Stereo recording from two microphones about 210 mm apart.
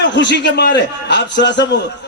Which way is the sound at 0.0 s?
55° left (ahead or behind).